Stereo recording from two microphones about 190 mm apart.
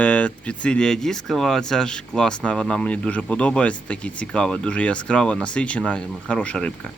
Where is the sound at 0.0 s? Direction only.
5° left (ahead or behind).